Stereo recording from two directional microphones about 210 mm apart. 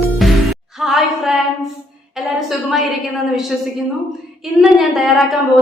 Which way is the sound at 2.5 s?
Centre (ahead or behind).